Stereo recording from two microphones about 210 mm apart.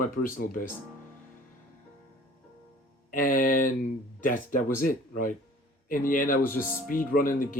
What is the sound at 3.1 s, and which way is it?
Speech, 40° left (ahead or behind).